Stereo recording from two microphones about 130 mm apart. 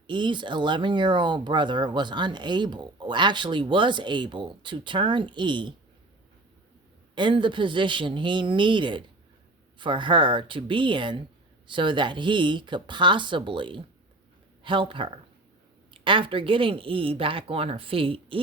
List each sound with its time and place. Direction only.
0.1 s speech: 35° right (ahead or behind)
7.2 s speech: 40° right (ahead or behind)